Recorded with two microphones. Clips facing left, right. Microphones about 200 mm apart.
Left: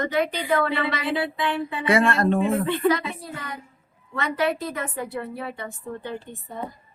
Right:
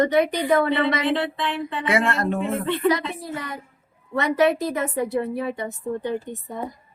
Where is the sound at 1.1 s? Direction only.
5° left (ahead or behind).